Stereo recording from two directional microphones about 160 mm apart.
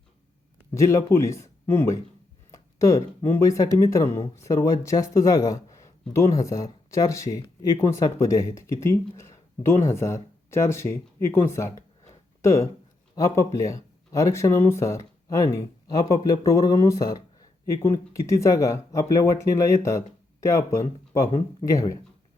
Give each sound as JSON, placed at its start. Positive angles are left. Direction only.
{"t": 0.7, "sound": "speech", "side_deg": 20}